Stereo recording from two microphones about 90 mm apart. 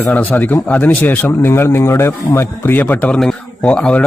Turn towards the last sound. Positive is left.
turn(degrees=10)  # may be behind; listen again after turning